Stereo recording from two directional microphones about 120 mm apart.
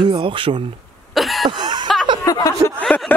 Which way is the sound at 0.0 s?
45° right (ahead or behind).